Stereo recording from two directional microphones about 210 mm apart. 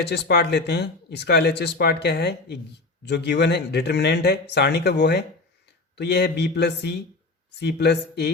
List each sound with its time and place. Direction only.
0.0 s speech: 50° left (ahead or behind)